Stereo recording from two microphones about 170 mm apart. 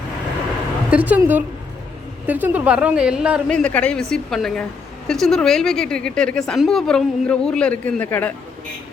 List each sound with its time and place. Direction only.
0.9 s a woman's voice: 10° right (ahead or behind)
3.5 s a woman's voice: 10° left (ahead or behind)